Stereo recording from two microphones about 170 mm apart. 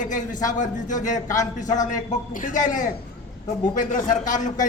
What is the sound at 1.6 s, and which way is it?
Speech, 20° left (ahead or behind).